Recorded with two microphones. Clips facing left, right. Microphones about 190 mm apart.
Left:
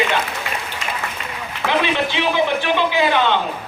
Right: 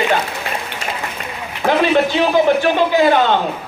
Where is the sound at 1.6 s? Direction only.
45° right (ahead or behind).